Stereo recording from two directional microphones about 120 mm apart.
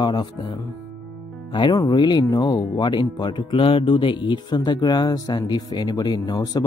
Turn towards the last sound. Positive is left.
turn(degrees=35)  # may be behind; listen again after turning